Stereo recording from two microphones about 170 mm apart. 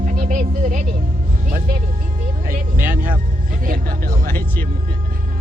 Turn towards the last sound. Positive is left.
turn(degrees=10)  # may be behind; listen again after turning